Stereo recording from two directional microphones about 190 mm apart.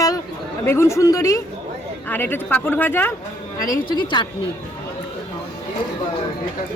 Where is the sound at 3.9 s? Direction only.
25° left (ahead or behind).